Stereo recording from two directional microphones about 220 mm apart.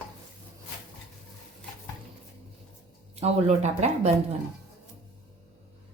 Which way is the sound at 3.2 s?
30° right (ahead or behind).